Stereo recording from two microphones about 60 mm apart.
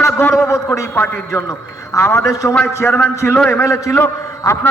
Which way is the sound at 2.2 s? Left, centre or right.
Left.